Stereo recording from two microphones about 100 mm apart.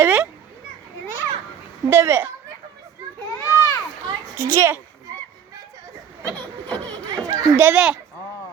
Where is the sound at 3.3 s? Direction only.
35° left (ahead or behind).